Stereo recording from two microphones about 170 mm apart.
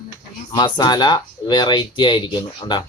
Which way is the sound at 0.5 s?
25° left (ahead or behind).